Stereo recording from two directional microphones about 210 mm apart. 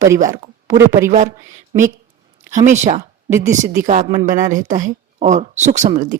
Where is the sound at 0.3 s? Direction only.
35° right (ahead or behind).